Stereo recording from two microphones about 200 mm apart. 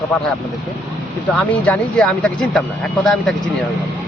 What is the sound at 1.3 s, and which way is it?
A man's voice, 5° left (ahead or behind).